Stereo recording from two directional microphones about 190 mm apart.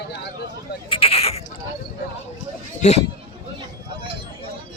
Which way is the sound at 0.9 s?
30° left (ahead or behind).